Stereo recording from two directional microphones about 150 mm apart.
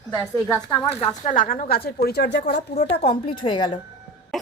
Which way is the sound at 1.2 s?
65° left (ahead or behind).